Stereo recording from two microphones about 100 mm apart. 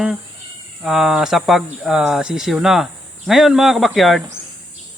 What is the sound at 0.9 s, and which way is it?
Speech, 5° right (ahead or behind).